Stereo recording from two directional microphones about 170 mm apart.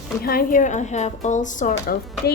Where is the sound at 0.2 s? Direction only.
60° left (ahead or behind).